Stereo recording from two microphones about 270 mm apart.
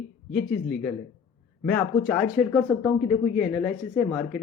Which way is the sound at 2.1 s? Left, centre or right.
Centre.